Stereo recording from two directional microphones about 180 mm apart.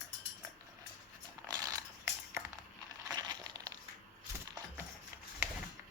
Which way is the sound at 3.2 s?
20° right (ahead or behind).